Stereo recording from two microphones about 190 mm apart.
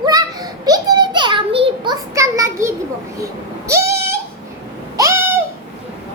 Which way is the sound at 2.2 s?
15° right (ahead or behind).